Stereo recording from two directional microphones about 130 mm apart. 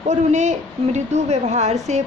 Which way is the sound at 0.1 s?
65° right (ahead or behind).